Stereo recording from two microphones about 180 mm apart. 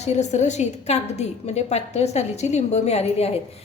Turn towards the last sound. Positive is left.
turn(degrees=35)  # may be behind; listen again after turning